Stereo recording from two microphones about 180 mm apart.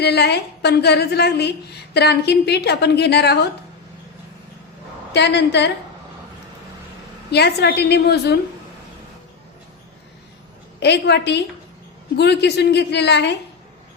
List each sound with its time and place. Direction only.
0.0 s a woman's voice: 65° left (ahead or behind)
5.1 s a woman's voice: 70° left (ahead or behind)
7.3 s a woman's voice: 65° left (ahead or behind)
10.8 s a woman's voice: 70° left (ahead or behind)